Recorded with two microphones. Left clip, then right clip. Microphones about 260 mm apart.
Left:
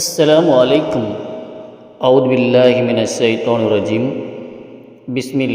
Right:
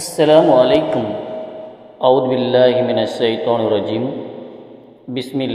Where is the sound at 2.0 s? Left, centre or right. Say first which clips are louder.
Left 2 dB; left.